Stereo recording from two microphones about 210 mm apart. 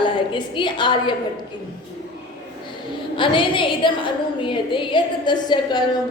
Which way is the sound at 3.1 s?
25° left (ahead or behind).